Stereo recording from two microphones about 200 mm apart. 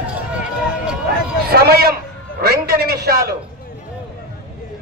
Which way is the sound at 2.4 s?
50° right (ahead or behind).